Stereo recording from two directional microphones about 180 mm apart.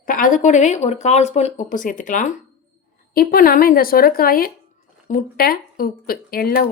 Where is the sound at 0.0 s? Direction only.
50° left (ahead or behind).